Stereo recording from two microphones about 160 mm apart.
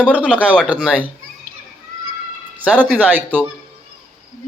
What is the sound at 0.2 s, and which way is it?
Speech, 10° right (ahead or behind).